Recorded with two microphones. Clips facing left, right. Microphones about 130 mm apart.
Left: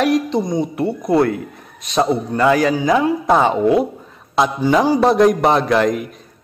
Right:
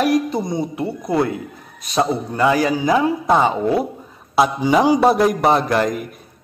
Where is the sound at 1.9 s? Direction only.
5° right (ahead or behind).